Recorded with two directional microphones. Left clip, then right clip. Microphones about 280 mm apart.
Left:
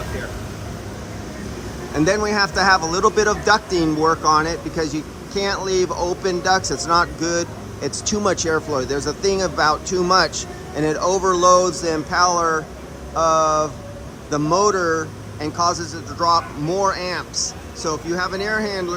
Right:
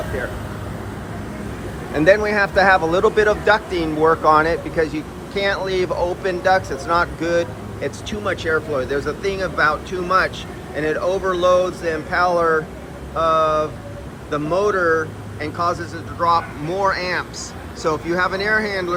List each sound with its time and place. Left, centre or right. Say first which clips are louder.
2.0 s speech: right 3 dB; centre
16.6 s speech: right 1 dB; centre